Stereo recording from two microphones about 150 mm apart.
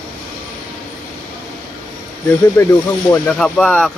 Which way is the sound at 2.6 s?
20° left (ahead or behind).